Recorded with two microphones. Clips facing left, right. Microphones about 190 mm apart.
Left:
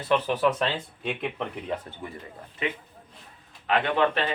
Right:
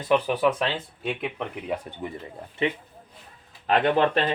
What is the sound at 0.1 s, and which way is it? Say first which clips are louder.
Speech: right 2 dB; 10° right (ahead or behind).